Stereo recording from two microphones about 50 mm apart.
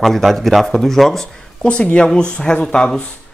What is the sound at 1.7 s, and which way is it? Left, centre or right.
Speech, left.